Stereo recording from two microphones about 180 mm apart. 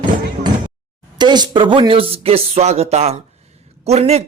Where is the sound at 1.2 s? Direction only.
25° right (ahead or behind).